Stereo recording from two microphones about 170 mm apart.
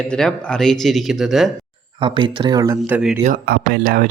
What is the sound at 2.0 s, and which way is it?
Speech, 30° right (ahead or behind).